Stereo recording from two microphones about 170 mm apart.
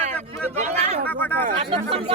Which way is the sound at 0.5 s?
40° right (ahead or behind).